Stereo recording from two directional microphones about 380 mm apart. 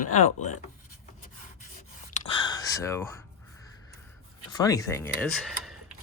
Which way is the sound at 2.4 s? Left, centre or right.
Centre.